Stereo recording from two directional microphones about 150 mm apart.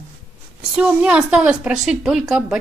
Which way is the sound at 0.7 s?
5° right (ahead or behind).